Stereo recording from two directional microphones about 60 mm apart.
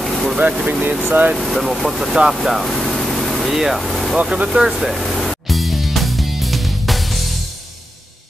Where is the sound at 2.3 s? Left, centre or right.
Centre.